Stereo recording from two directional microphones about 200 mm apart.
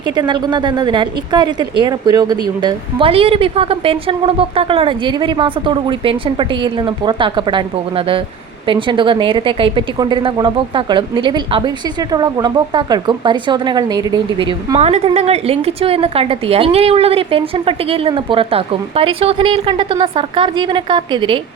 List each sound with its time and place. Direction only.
0.0 s a woman's voice: 20° right (ahead or behind)